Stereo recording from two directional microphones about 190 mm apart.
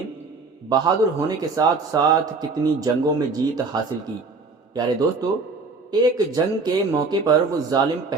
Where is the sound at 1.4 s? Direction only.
20° right (ahead or behind).